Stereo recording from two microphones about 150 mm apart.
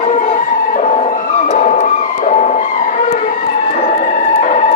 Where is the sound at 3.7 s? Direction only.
50° left (ahead or behind).